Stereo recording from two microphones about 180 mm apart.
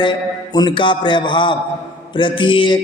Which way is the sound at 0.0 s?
25° left (ahead or behind).